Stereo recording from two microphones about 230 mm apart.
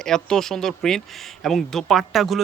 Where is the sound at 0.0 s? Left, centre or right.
Centre.